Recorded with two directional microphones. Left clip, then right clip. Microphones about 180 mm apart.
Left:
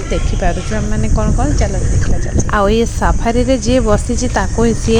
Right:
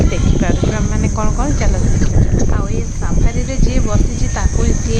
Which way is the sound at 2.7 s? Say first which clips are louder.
Left 11 dB; 45° left (ahead or behind).